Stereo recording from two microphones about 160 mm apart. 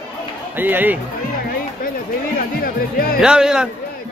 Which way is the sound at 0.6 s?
10° right (ahead or behind).